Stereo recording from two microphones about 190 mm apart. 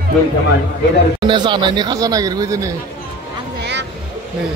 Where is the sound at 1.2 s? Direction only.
25° right (ahead or behind).